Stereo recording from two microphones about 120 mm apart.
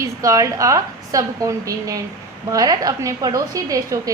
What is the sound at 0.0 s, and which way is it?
A woman's voice, 25° right (ahead or behind).